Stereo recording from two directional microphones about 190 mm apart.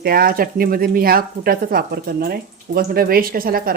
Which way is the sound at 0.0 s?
50° right (ahead or behind).